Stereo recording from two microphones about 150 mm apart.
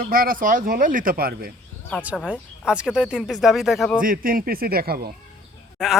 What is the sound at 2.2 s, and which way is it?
Speech, 5° right (ahead or behind).